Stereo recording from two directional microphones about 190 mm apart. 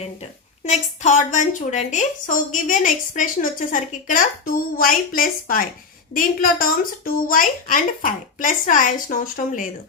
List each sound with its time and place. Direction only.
0.6 s a woman's voice: 40° left (ahead or behind)